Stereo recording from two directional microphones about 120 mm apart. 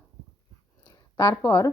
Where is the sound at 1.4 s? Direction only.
30° left (ahead or behind).